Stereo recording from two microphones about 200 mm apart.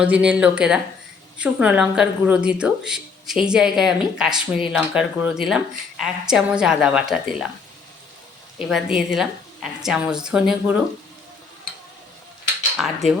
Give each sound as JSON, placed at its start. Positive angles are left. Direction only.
{"t": 0.0, "sound": "speech", "side_deg": -5}
{"t": 8.5, "sound": "speech", "side_deg": -5}
{"t": 12.7, "sound": "speech", "side_deg": 0}